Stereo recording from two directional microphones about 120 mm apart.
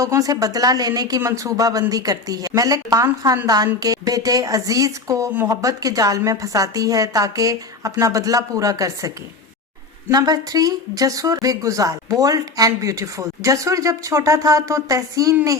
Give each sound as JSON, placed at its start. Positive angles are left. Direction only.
{"t": 0.0, "sound": "speech", "side_deg": -30}